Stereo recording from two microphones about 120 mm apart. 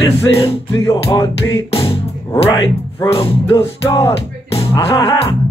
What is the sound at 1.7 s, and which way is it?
Music, 50° left (ahead or behind).